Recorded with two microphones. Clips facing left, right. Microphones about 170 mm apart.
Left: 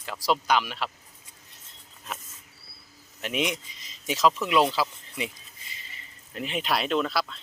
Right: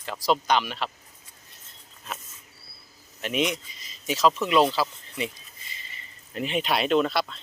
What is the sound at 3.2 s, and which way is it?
Speech, 10° left (ahead or behind).